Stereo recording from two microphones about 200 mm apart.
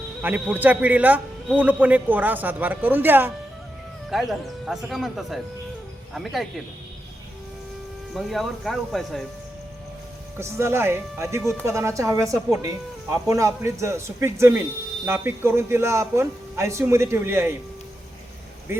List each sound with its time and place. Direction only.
0.2 s a man's voice: 10° right (ahead or behind)
8.1 s speech: centre (ahead or behind)
10.3 s a man's voice: 15° right (ahead or behind)
18.7 s speech: 10° right (ahead or behind)